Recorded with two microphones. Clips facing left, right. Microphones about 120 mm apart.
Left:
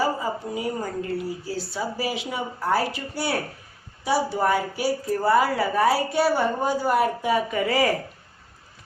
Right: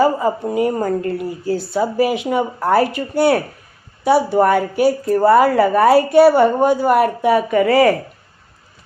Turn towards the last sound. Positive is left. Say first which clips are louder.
# right 9 dB
turn(degrees=-65)  # may be behind; listen again after turning